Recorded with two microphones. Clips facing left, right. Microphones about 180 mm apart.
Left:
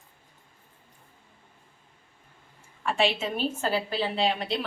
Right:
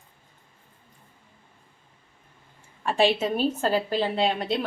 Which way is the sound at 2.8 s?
35° right (ahead or behind).